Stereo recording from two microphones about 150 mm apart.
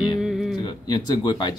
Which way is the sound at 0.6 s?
30° left (ahead or behind).